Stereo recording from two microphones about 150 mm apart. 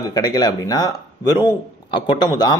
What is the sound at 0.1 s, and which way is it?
Speech, 25° left (ahead or behind).